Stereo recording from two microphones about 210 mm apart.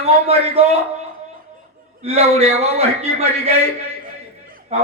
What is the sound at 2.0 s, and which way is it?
A man's voice, 30° right (ahead or behind).